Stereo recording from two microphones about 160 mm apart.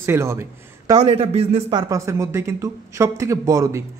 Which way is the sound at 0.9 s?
35° right (ahead or behind).